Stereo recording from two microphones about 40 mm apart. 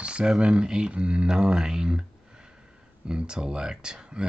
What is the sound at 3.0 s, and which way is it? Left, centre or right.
Speech, right.